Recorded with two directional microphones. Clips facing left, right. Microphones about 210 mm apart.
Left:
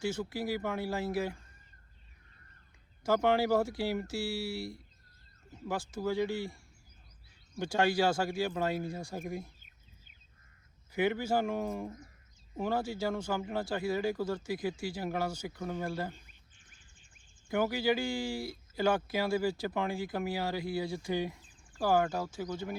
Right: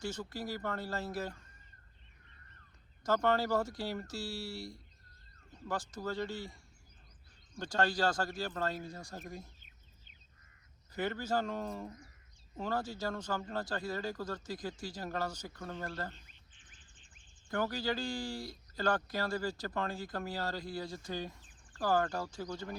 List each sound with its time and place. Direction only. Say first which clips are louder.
0.0 s speech: left 5 dB; 10° left (ahead or behind)
3.0 s speech: left 3 dB; 10° left (ahead or behind)
10.9 s speech: left 5 dB; 10° left (ahead or behind)
16.2 s duck: left 1 dB; 45° left (ahead or behind)
17.5 s speech: left 5 dB; 10° left (ahead or behind)